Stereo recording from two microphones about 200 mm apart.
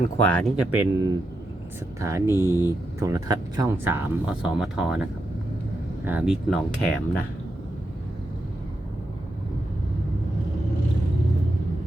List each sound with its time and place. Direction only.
0.2 s speech: 5° left (ahead or behind)
0.5 s speech: 10° right (ahead or behind)
2.3 s speech: 15° left (ahead or behind)
3.0 s speech: 20° right (ahead or behind)
6.1 s speech: 5° right (ahead or behind)